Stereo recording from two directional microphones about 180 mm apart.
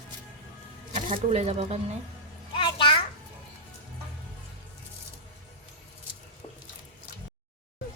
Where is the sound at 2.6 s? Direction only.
25° left (ahead or behind).